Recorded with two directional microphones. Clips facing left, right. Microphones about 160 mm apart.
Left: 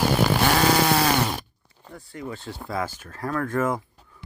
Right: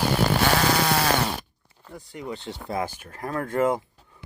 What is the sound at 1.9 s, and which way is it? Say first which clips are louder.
Speech: even; 15° right (ahead or behind).